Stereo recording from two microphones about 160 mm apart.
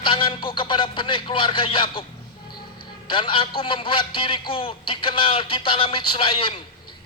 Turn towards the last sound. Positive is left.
turn(degrees=30)  # may be behind; listen again after turning